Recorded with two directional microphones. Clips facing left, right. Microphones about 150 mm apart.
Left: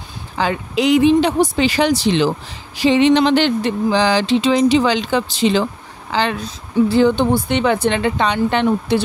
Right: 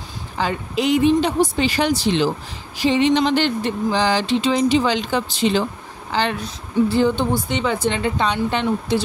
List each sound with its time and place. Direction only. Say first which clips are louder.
0.4 s speech: left 3 dB; 90° left
6.9 s a woman's voice: left 6 dB; 75° left (ahead or behind); by 9.0 s 60° left (ahead or behind)